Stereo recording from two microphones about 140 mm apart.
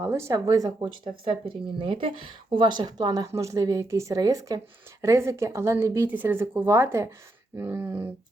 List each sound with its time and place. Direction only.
0.0 s speech: 20° right (ahead or behind)
1.0 s speech: 45° right (ahead or behind); by 8.1 s 15° right (ahead or behind)